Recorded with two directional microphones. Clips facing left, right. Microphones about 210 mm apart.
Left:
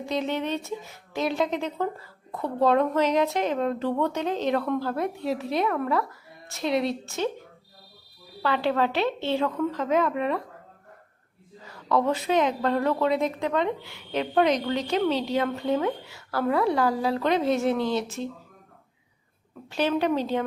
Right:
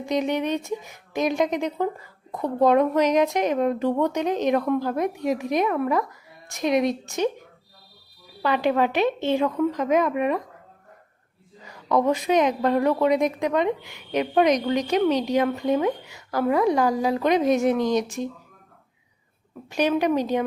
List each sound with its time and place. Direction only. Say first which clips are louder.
0.0 s speech: right 4 dB; 15° right (ahead or behind)
11.6 s speech: right 3 dB; 15° right (ahead or behind)
19.7 s speech: right 3 dB; 15° right (ahead or behind)